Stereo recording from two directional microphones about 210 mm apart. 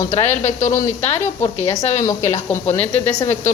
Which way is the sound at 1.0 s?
30° left (ahead or behind).